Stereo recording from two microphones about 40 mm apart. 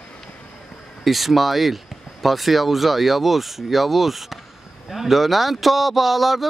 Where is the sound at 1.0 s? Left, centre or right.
Centre.